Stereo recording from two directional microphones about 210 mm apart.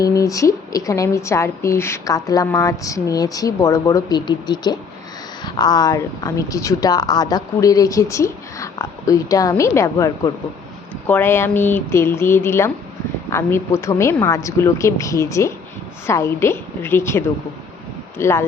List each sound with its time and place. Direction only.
0.0 s a woman's voice: 15° left (ahead or behind)